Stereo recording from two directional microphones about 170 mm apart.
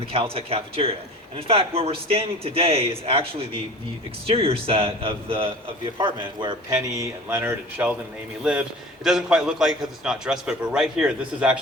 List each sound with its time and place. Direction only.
0.0 s a man's voice: 35° right (ahead or behind); by 7.9 s 10° right (ahead or behind)
9.0 s a man's voice: 5° right (ahead or behind)